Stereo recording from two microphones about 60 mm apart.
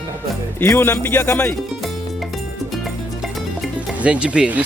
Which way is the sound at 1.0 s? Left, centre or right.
Left.